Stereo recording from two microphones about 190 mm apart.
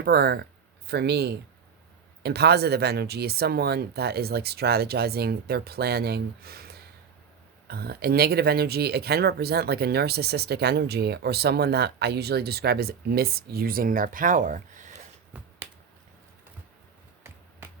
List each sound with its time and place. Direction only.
0.0 s speech: 55° right (ahead or behind)